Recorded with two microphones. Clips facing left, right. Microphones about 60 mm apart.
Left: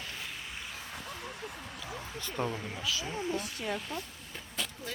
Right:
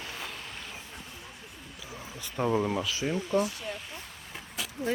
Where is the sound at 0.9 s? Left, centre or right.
Left.